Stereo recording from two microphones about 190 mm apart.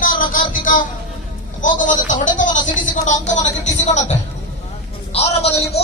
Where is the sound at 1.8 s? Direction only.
45° left (ahead or behind).